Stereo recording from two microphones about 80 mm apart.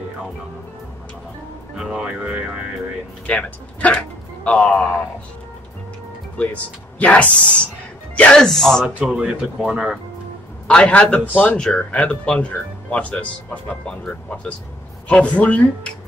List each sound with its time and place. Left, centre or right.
1.8 s speech: centre
3.3 s speech: centre
6.3 s speech: centre
10.7 s speech: centre